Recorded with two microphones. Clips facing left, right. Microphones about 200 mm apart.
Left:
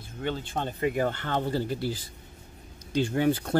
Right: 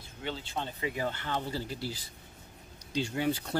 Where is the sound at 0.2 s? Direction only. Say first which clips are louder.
Left 6 dB; 50° left (ahead or behind).